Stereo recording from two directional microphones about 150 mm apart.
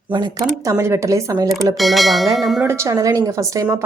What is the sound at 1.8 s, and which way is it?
Bell, centre (ahead or behind).